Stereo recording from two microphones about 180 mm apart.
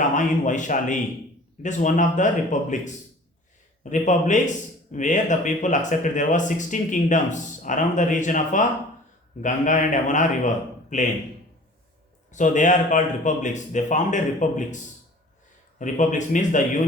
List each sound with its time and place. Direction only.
0.2 s a man's voice: 45° left (ahead or behind)
12.3 s a man's voice: 45° left (ahead or behind)
15.8 s a man's voice: 45° left (ahead or behind)